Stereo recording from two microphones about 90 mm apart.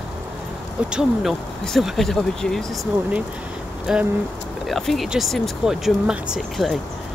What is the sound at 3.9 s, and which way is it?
Speech, 10° right (ahead or behind).